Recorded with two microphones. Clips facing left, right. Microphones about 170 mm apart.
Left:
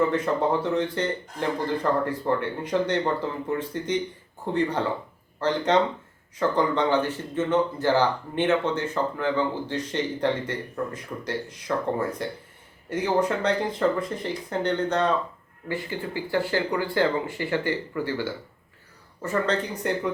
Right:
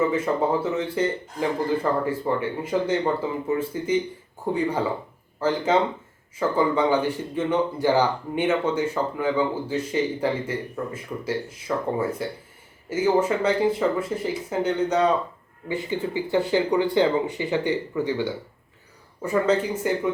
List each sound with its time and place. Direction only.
0.0 s speech: 5° right (ahead or behind)